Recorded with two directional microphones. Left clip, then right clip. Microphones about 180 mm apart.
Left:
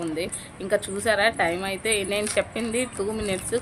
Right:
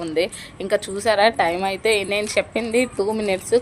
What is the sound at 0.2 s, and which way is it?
A woman's voice, 40° right (ahead or behind).